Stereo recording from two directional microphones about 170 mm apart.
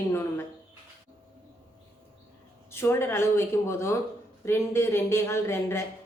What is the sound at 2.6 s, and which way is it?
Speech, 15° left (ahead or behind).